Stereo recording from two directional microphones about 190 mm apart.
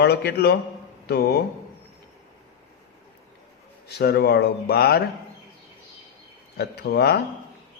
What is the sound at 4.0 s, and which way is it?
A man's voice, 60° left (ahead or behind).